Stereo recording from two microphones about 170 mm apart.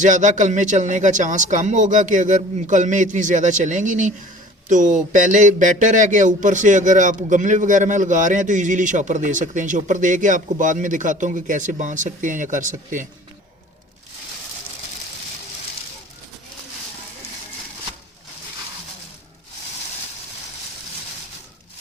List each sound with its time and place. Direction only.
0.0 s a man's voice: 45° right (ahead or behind)